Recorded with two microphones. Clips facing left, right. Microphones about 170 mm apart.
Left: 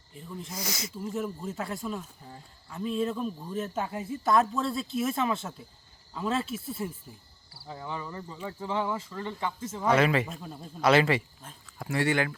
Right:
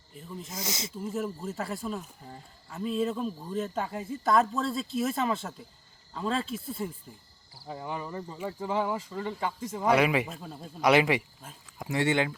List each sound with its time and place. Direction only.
0.5 s speech: 20° right (ahead or behind)
1.0 s speech: centre (ahead or behind)
7.7 s speech: 10° right (ahead or behind)
10.2 s speech: centre (ahead or behind)
10.8 s speech: 15° right (ahead or behind)